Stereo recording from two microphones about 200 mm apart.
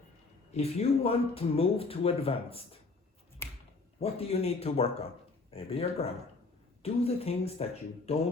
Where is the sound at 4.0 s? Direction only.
30° left (ahead or behind).